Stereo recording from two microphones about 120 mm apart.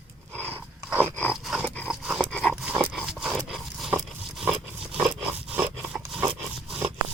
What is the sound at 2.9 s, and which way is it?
Dog, 5° right (ahead or behind).